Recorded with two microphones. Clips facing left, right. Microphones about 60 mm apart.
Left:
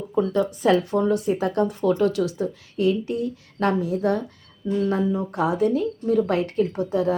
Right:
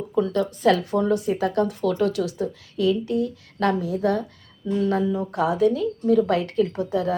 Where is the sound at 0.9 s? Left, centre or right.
Left.